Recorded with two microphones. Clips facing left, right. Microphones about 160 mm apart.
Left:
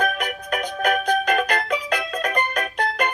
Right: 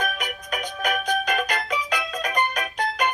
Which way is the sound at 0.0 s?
55° left (ahead or behind).